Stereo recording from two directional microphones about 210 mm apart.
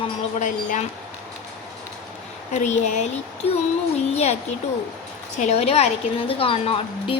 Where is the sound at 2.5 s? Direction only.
35° left (ahead or behind).